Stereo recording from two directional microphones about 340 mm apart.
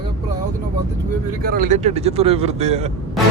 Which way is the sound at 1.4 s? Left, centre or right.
Right.